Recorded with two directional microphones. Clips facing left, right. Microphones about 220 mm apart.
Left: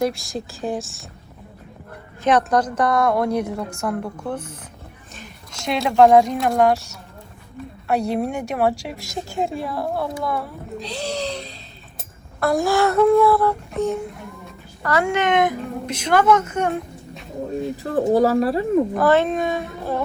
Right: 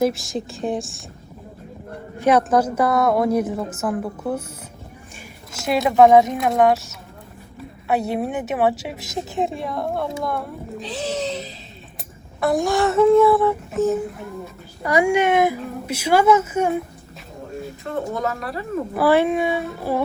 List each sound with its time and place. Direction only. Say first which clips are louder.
0.0 s a woman's voice: right 2 dB; centre (ahead or behind)
2.2 s a woman's voice: right 2 dB; 5° right (ahead or behind)
14.8 s speech: right 3 dB; 15° right (ahead or behind)
17.9 s speech: left 9 dB; 35° left (ahead or behind)
18.9 s speech: even; 10° right (ahead or behind)